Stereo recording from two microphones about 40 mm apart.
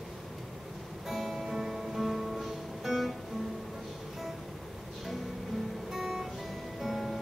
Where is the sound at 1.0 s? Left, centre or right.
Centre.